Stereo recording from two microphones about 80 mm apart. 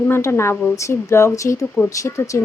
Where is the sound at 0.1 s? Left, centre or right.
Left.